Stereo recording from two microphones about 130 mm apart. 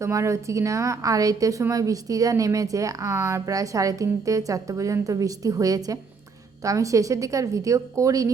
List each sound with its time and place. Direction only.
0.0 s a woman's voice: 25° right (ahead or behind)